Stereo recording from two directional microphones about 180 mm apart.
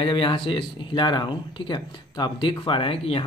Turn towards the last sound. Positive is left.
turn(degrees=30)  # may be behind; listen again after turning